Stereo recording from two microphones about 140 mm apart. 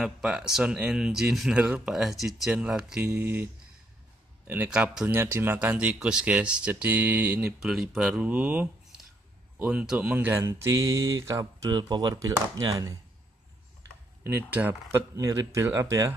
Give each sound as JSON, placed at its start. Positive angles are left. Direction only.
{"t": 0.0, "sound": "speech", "side_deg": -5}
{"t": 4.5, "sound": "speech", "side_deg": -10}
{"t": 7.6, "sound": "speech", "side_deg": 0}
{"t": 14.2, "sound": "speech", "side_deg": -15}